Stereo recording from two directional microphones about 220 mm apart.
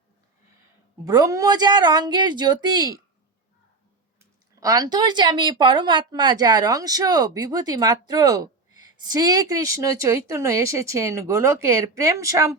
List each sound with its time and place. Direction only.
1.0 s a woman's voice: 15° right (ahead or behind)
4.2 s speech: 15° right (ahead or behind)